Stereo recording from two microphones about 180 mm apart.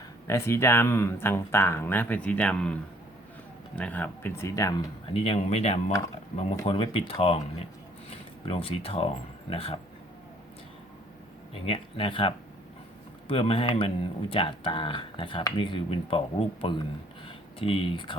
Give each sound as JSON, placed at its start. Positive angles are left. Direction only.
{"t": 0.3, "sound": "speech", "side_deg": 15}
{"t": 3.8, "sound": "speech", "side_deg": 10}
{"t": 5.1, "sound": "speech", "side_deg": 30}
{"t": 11.5, "sound": "speech", "side_deg": 30}